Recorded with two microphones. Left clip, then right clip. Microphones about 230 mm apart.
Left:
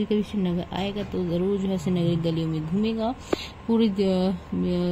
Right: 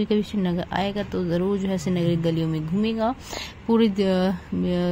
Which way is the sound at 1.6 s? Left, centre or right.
Right.